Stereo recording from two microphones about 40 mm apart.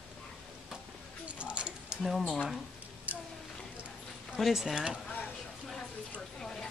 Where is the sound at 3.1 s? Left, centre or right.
Right.